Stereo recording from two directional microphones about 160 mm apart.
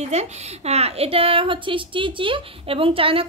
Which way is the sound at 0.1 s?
40° right (ahead or behind).